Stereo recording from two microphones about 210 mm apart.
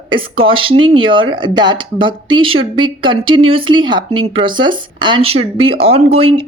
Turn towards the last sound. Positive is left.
turn(degrees=-30)  # may be behind; listen again after turning